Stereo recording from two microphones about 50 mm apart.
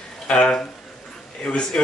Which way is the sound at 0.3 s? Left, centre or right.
Centre.